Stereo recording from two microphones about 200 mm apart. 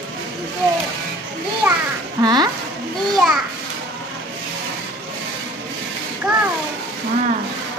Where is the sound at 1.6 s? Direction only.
15° right (ahead or behind).